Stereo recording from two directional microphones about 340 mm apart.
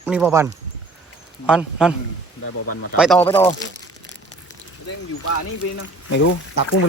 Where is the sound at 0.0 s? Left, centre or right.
Centre.